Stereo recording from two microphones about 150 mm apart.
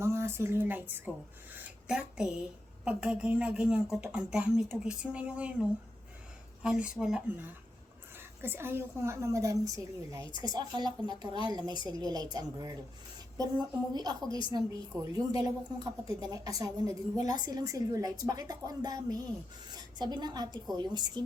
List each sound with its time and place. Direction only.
0.0 s a woman's voice: 20° right (ahead or behind)
8.4 s a woman's voice: 15° right (ahead or behind)